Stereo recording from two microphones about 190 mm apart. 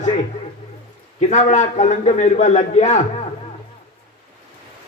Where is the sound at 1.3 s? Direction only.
40° left (ahead or behind).